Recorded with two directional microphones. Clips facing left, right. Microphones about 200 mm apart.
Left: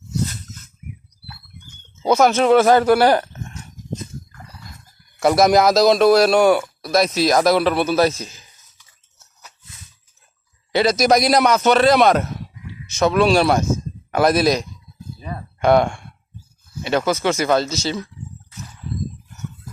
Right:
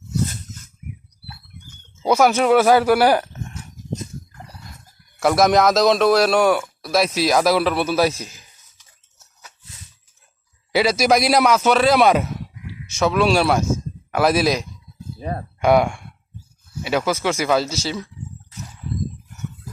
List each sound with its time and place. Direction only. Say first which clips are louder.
2.0 s speech: left 1 dB; 10° right (ahead or behind)
5.2 s a man's voice: left 1 dB; centre (ahead or behind)
10.7 s a man's voice: left 1 dB; 5° right (ahead or behind)
15.2 s speech: right 5 dB; 50° right (ahead or behind)
15.6 s a man's voice: left 1 dB; 10° right (ahead or behind)